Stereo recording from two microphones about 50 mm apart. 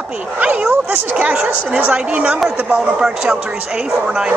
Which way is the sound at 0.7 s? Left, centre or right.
Right.